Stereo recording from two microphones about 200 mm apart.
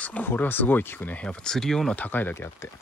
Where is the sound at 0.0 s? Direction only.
10° left (ahead or behind).